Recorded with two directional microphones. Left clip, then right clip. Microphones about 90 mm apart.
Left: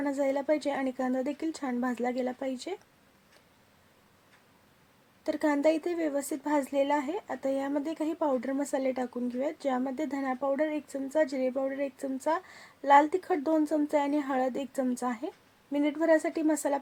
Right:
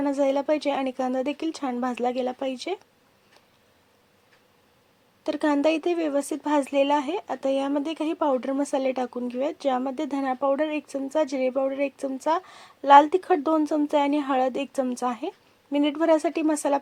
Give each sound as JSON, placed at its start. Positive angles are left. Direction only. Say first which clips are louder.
{"t": 0.0, "sound": "speech", "louder": "right 6 dB", "side_deg": -20}
{"t": 5.2, "sound": "speech", "louder": "right 4 dB", "side_deg": -20}
{"t": 11.5, "sound": "speech", "louder": "right 6 dB", "side_deg": -40}
{"t": 11.9, "sound": "speech", "louder": "right 5 dB", "side_deg": -20}